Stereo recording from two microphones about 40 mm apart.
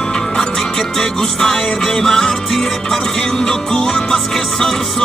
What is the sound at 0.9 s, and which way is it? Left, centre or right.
Music, centre.